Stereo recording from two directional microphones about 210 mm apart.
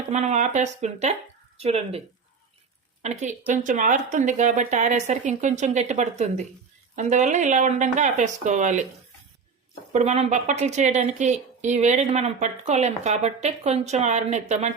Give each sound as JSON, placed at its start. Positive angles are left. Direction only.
{"t": 0.1, "sound": "a woman's voice", "side_deg": -35}
{"t": 3.0, "sound": "a woman's voice", "side_deg": -35}
{"t": 9.9, "sound": "a woman's voice", "side_deg": -30}